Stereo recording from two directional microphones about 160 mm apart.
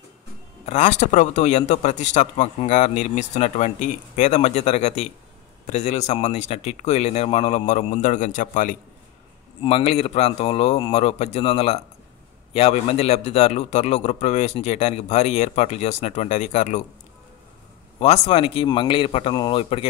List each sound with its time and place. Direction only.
0.7 s a man's voice: 45° left (ahead or behind)
9.6 s a man's voice: 35° left (ahead or behind)
17.9 s a man's voice: 40° left (ahead or behind)